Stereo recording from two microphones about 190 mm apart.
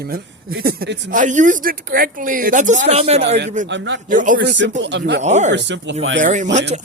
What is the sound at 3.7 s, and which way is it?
Speech, 75° right (ahead or behind).